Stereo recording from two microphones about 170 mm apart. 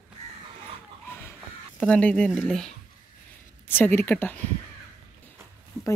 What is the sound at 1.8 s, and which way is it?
A woman's voice, 5° left (ahead or behind).